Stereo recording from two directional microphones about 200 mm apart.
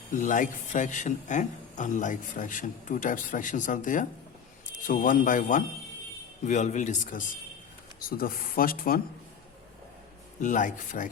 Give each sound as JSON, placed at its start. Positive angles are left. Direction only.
{"t": 0.1, "sound": "a man's voice", "side_deg": 40}
{"t": 10.4, "sound": "a man's voice", "side_deg": 40}